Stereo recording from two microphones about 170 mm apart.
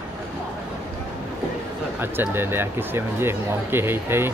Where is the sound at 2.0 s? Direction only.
10° right (ahead or behind).